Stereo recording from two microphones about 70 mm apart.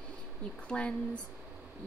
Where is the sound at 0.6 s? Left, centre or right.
Centre.